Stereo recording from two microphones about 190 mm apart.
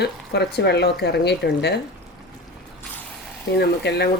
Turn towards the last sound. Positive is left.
turn(degrees=60)  # may be behind; listen again after turning